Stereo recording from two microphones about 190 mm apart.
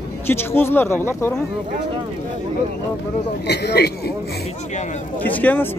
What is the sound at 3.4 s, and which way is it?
Speech, 60° left (ahead or behind).